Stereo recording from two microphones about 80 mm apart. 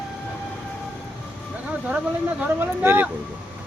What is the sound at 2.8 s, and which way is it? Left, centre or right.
Speech, right.